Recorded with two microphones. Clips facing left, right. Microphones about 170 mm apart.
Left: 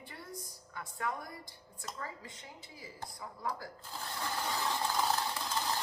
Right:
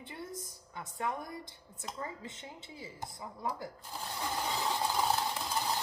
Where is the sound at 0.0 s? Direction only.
20° right (ahead or behind).